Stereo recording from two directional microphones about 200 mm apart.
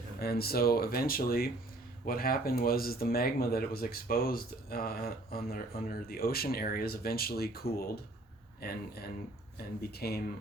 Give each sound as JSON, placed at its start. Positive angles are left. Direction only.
{"t": 0.2, "sound": "speech", "side_deg": 50}
{"t": 9.8, "sound": "speech", "side_deg": 50}